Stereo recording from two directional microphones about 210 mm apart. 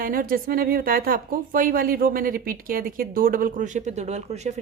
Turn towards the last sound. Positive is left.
turn(degrees=-30)  # may be behind; listen again after turning